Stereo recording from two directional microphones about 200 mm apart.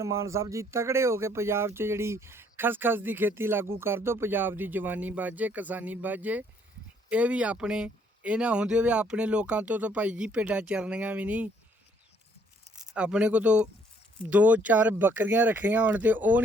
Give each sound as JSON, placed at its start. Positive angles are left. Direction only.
{"t": 0.0, "sound": "speech", "side_deg": -15}
{"t": 12.9, "sound": "speech", "side_deg": -5}